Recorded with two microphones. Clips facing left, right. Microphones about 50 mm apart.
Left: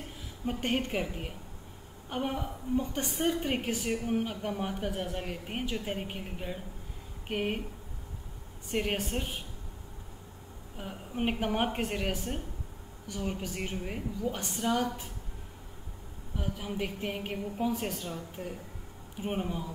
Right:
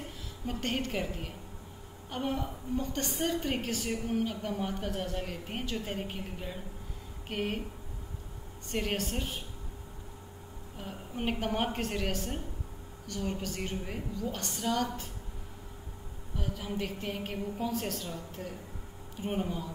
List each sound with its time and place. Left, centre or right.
0.5 s a woman's voice: centre
8.6 s a woman's voice: centre
10.8 s a woman's voice: centre
16.3 s a woman's voice: centre